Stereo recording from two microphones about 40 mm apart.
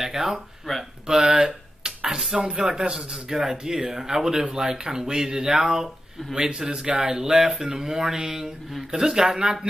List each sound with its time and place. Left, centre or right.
0.0 s speech: centre
0.7 s speech: centre
1.0 s a sound: centre
2.5 s a man's voice: centre